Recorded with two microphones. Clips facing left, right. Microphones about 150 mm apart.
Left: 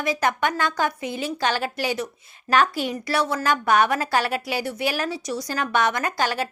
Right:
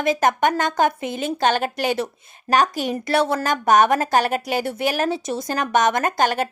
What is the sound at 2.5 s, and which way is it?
A woman's voice, 40° right (ahead or behind).